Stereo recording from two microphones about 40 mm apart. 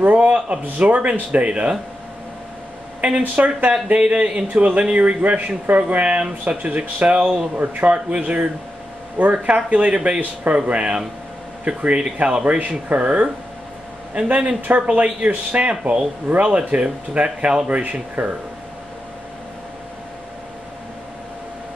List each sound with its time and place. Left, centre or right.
0.0 s a man's voice: right
3.2 s a man's voice: right